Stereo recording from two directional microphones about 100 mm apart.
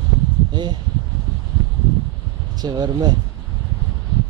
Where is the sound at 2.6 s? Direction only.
45° right (ahead or behind).